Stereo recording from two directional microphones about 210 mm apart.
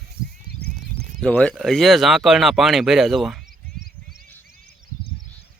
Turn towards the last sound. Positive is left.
turn(degrees=0)  # may be behind; listen again after turning